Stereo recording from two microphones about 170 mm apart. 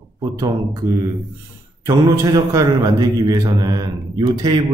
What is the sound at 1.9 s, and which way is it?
A man's voice, 20° right (ahead or behind).